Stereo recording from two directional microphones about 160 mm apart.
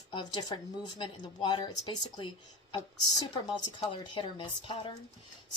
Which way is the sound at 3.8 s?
30° left (ahead or behind).